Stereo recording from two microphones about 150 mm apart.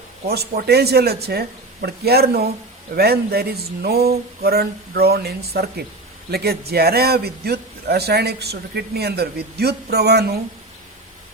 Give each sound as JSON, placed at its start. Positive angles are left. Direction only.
{"t": 0.3, "sound": "a man's voice", "side_deg": -90}